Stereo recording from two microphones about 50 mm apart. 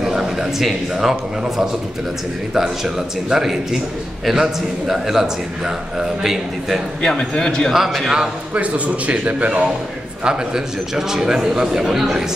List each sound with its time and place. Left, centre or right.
0.0 s a sound: centre
0.9 s a man's voice: centre
7.0 s a man's voice: centre
7.7 s a man's voice: centre
8.5 s a man's voice: right
10.2 s a man's voice: centre